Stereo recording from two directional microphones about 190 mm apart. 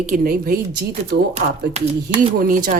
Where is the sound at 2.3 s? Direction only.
45° right (ahead or behind).